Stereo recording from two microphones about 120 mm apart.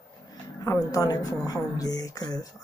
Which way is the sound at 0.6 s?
30° left (ahead or behind).